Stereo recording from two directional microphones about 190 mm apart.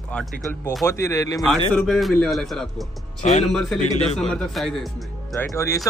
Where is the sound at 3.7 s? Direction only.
40° left (ahead or behind).